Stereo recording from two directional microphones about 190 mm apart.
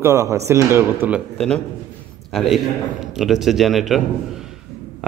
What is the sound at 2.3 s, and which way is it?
Speech, centre (ahead or behind).